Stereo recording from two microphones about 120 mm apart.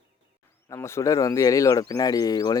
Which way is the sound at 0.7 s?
20° left (ahead or behind).